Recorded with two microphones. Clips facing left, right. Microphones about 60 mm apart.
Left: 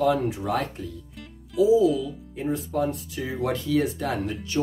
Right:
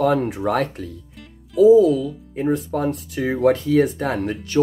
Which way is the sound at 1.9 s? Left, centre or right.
Right.